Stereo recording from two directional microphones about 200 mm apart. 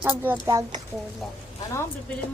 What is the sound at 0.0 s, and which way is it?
Speech, 10° right (ahead or behind).